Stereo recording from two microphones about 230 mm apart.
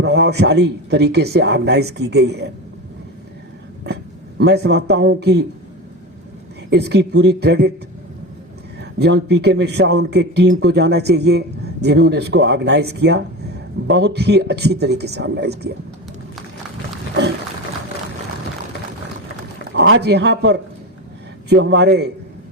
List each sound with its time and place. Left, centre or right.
0.0 s a man's voice: right
4.4 s a man's voice: right
6.7 s a man's voice: right
8.8 s a man's voice: right
19.7 s a man's voice: right